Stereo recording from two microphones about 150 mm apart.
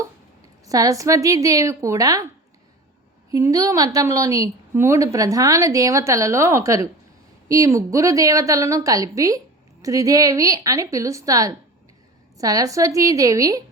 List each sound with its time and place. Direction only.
0.6 s a woman's voice: 25° right (ahead or behind)
3.3 s a woman's voice: 25° right (ahead or behind)